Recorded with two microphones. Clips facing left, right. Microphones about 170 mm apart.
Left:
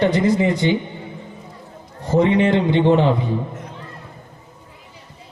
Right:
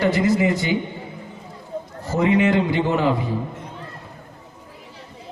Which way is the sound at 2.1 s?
30° left (ahead or behind).